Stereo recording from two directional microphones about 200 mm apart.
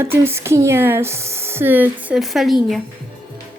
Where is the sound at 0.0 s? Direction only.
10° right (ahead or behind).